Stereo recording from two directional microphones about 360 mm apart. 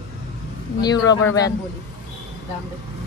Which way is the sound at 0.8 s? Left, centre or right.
Centre.